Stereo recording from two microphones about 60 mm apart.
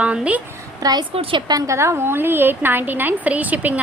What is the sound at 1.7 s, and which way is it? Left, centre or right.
A woman's voice, right.